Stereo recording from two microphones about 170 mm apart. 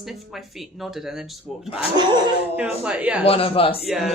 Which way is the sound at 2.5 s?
5° right (ahead or behind).